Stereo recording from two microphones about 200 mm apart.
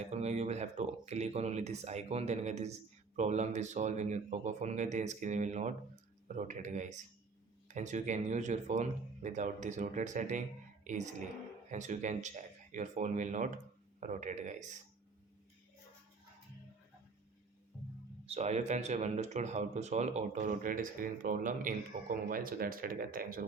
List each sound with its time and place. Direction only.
0.0 s speech: 35° right (ahead or behind)
18.3 s speech: 30° right (ahead or behind)